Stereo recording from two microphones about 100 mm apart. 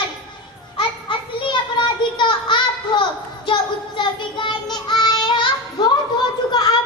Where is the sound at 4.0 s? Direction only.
55° left (ahead or behind).